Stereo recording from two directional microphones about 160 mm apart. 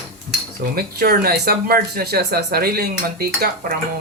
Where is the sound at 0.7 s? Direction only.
70° right (ahead or behind).